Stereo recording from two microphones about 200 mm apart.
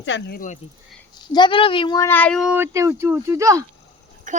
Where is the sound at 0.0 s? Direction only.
65° left (ahead or behind).